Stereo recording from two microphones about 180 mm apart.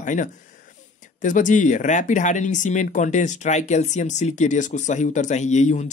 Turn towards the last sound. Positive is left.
turn(degrees=40)  # may be behind; listen again after turning